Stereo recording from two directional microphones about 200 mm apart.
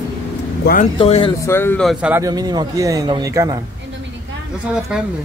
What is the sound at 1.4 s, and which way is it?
Speech, 10° left (ahead or behind).